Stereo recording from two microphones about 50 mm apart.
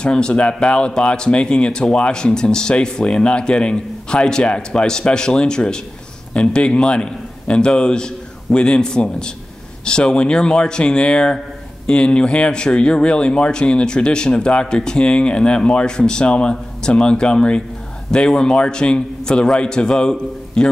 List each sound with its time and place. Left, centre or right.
0.0 s speech: centre